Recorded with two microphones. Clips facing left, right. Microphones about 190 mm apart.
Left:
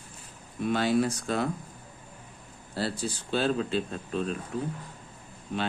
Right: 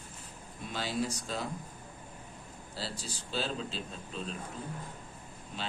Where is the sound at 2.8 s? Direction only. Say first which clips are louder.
Left 10 dB; 60° left (ahead or behind).